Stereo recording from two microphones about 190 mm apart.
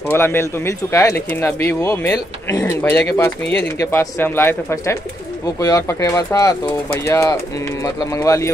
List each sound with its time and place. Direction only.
0.1 s speech: 10° left (ahead or behind)